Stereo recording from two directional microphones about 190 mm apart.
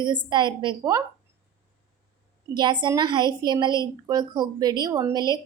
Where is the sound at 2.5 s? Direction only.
25° right (ahead or behind).